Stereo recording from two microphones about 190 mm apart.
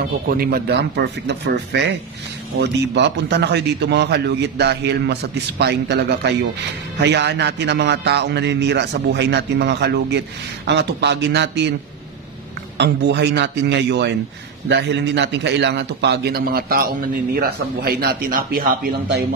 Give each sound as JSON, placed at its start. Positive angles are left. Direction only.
{"t": 0.3, "sound": "a man's voice", "side_deg": -50}
{"t": 12.7, "sound": "a man's voice", "side_deg": -60}